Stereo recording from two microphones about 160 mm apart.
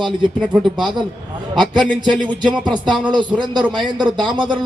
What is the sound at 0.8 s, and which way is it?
A man's voice, 30° right (ahead or behind).